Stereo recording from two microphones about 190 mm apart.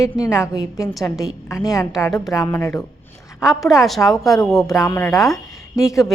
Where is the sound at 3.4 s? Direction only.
Centre (ahead or behind).